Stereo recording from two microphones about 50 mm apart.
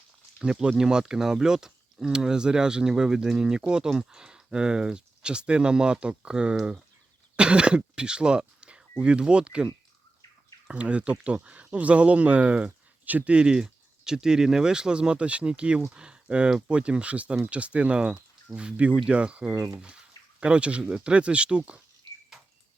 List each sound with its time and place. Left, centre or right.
0.3 s speech: centre
10.7 s speech: right
13.3 s speech: centre